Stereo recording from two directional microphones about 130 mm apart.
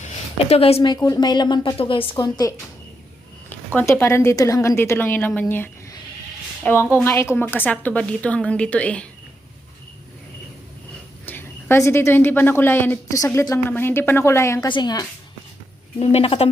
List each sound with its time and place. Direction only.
0.0 s a sound: 50° left (ahead or behind)
0.9 s a woman's voice: 25° left (ahead or behind)
3.5 s a woman's voice: 15° left (ahead or behind)
11.3 s a woman's voice: 15° left (ahead or behind)
14.7 s a woman's voice: 35° left (ahead or behind)
16.0 s a woman's voice: 50° left (ahead or behind)